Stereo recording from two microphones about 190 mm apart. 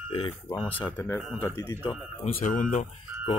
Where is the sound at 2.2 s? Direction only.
40° left (ahead or behind).